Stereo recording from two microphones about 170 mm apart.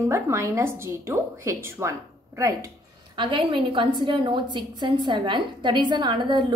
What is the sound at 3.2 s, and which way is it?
A woman's voice, 30° right (ahead or behind).